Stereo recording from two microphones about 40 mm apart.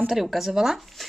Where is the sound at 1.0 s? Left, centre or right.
Centre.